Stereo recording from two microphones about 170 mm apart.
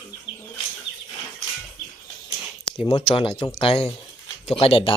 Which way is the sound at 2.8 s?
25° left (ahead or behind).